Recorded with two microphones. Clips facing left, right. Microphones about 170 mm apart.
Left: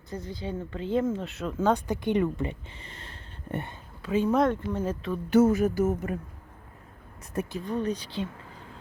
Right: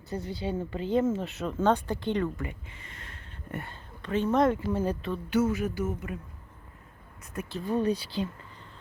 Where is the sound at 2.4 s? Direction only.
30° left (ahead or behind).